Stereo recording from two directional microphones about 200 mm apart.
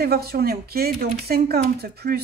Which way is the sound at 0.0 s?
50° right (ahead or behind).